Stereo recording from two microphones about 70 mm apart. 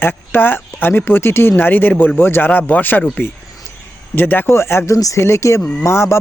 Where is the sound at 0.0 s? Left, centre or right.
Left.